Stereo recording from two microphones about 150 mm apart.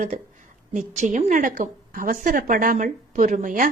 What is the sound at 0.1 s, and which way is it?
A woman's voice, 60° right (ahead or behind).